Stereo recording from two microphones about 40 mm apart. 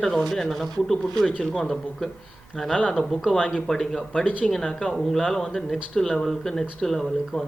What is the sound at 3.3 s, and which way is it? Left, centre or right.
A man's voice, centre.